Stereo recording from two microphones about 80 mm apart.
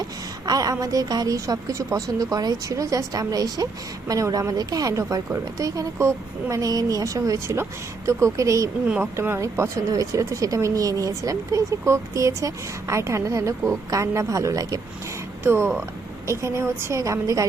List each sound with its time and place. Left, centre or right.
0.0 s a woman's voice: right
15.4 s speech: right